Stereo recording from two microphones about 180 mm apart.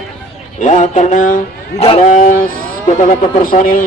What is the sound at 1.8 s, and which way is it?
Speech, 35° left (ahead or behind).